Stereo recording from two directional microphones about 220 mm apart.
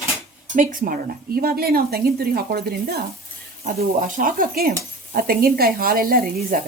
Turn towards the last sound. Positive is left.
turn(degrees=-40)  # may be behind; listen again after turning